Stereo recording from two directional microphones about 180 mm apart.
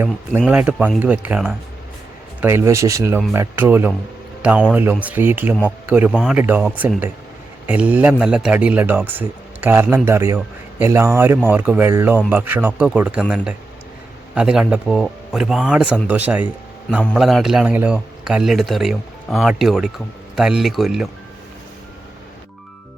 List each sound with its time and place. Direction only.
0.0 s a man's voice: 10° right (ahead or behind)